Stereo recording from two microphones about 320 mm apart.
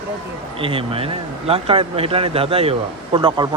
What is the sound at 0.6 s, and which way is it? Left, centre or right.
Speech, centre.